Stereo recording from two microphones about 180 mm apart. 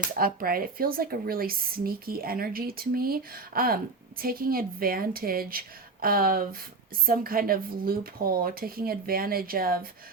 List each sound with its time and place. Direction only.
0.2 s speech: 55° right (ahead or behind)